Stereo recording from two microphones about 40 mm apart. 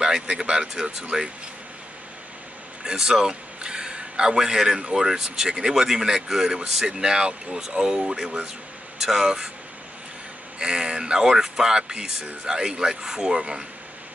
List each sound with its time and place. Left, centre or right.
0.0 s a man's voice: centre
2.8 s a man's voice: centre
10.6 s a man's voice: centre